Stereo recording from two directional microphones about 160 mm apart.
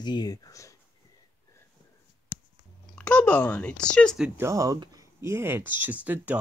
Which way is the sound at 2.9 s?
10° left (ahead or behind).